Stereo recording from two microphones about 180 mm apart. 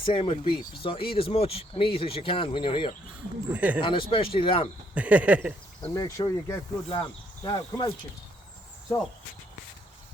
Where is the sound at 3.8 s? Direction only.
30° left (ahead or behind).